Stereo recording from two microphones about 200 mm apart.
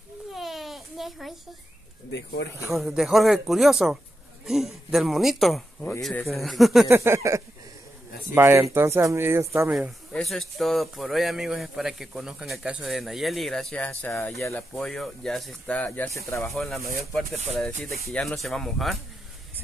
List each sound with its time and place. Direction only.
0.3 s a sound: centre (ahead or behind)
2.7 s speech: centre (ahead or behind)
6.9 s speech: 15° right (ahead or behind)
9.8 s speech: centre (ahead or behind)
17.7 s speech: 45° right (ahead or behind)
18.0 s speech: centre (ahead or behind)